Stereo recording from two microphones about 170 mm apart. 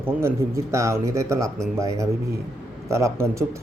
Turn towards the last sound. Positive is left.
turn(degrees=-15)  # may be behind; listen again after turning